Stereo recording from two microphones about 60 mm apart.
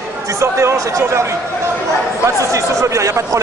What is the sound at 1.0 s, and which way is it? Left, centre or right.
Speech, right.